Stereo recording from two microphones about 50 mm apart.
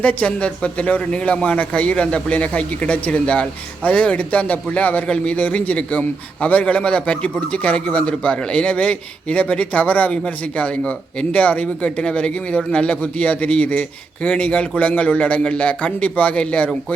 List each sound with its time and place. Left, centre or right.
0.0 s a man's voice: left